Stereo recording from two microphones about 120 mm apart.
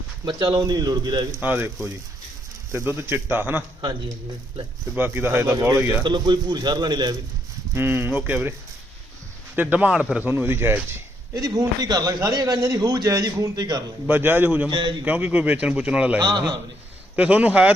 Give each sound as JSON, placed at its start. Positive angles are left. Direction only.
{"t": 0.3, "sound": "a man's voice", "side_deg": -35}
{"t": 1.4, "sound": "speech", "side_deg": -15}
{"t": 4.9, "sound": "speech", "side_deg": -15}
{"t": 6.0, "sound": "a man's voice", "side_deg": -40}
{"t": 7.7, "sound": "speech", "side_deg": -20}
{"t": 9.6, "sound": "speech", "side_deg": -15}
{"t": 11.3, "sound": "a man's voice", "side_deg": -30}
{"t": 14.1, "sound": "speech", "side_deg": -15}
{"t": 14.7, "sound": "a man's voice", "side_deg": -40}
{"t": 15.0, "sound": "speech", "side_deg": -15}
{"t": 16.2, "sound": "a man's voice", "side_deg": -35}
{"t": 17.2, "sound": "speech", "side_deg": -10}